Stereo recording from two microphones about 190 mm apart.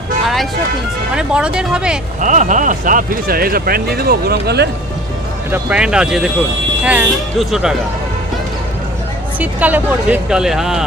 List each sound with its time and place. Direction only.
1.1 s speech: 5° right (ahead or behind)
2.2 s speech: 40° right (ahead or behind); by 4.7 s 60° right (ahead or behind)
5.5 s speech: 5° right (ahead or behind)
9.4 s speech: 10° right (ahead or behind)